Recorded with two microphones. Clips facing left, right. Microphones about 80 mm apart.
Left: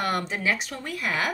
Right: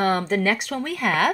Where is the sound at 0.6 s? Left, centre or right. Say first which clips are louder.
Right 6 dB; right.